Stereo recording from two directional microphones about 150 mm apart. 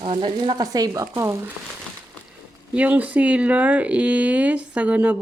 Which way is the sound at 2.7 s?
10° right (ahead or behind).